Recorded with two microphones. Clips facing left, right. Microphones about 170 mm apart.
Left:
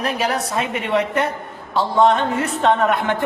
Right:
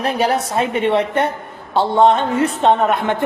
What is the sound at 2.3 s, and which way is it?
Speech, 25° right (ahead or behind).